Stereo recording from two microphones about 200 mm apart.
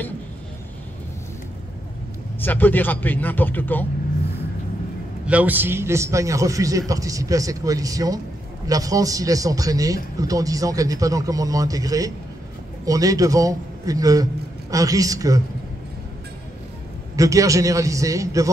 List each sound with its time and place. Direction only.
2.4 s speech: 10° left (ahead or behind)
5.2 s a man's voice: 5° right (ahead or behind)
17.1 s a man's voice: 15° right (ahead or behind)